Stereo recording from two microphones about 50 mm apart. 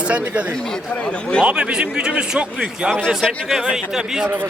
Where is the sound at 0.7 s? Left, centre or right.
Centre.